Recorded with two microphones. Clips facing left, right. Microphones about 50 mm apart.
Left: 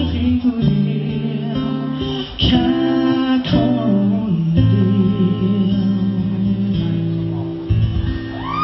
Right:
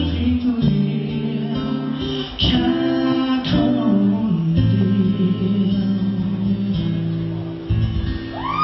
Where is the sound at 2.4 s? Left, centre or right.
Centre.